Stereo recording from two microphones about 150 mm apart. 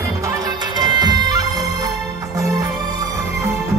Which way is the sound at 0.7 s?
25° right (ahead or behind).